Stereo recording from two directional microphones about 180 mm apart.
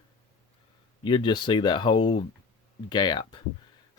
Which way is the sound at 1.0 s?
25° left (ahead or behind).